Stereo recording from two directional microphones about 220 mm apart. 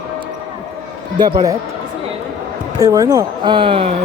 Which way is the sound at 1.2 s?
15° right (ahead or behind).